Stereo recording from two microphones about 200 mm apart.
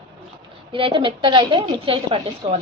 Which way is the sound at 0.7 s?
25° right (ahead or behind).